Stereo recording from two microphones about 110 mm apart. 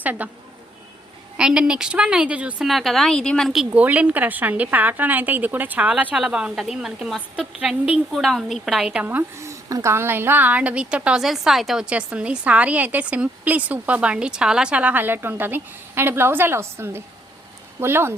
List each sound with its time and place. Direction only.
0.0 s speech: 15° right (ahead or behind)
1.4 s a woman's voice: 10° right (ahead or behind)
2.6 s a woman's voice: centre (ahead or behind)
3.8 s a woman's voice: 10° right (ahead or behind)